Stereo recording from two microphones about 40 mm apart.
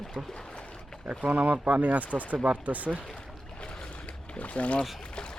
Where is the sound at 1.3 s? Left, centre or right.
Right.